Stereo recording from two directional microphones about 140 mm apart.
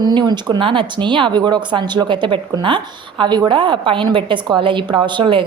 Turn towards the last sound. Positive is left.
turn(degrees=-35)  # may be behind; listen again after turning